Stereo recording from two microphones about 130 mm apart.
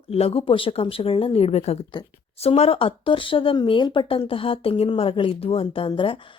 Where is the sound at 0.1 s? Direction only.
45° left (ahead or behind).